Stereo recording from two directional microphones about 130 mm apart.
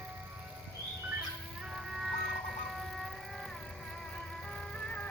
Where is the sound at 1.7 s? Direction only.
5° right (ahead or behind).